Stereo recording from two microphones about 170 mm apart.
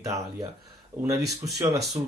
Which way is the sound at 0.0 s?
20° right (ahead or behind).